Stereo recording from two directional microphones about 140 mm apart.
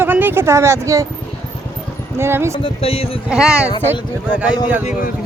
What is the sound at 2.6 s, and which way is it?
Speech, 45° left (ahead or behind).